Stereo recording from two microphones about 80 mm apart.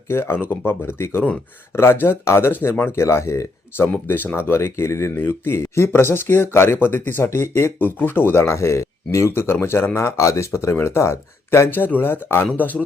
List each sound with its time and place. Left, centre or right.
0.1 s speech: left
4.0 s speech: left